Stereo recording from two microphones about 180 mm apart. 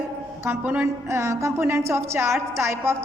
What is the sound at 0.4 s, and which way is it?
A woman's voice, 10° right (ahead or behind).